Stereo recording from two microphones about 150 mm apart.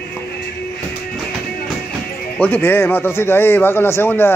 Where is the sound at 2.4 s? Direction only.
15° left (ahead or behind).